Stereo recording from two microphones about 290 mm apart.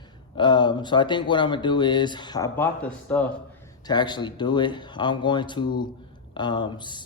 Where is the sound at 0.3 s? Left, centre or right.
Centre.